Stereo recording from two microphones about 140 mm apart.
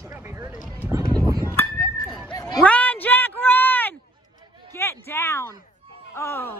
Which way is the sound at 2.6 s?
10° left (ahead or behind).